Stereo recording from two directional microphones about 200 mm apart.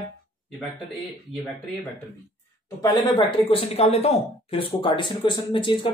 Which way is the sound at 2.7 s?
20° left (ahead or behind).